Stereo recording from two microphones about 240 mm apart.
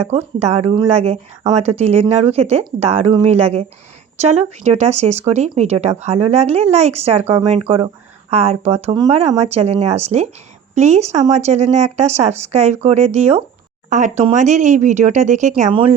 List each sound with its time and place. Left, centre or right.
0.0 s speech: right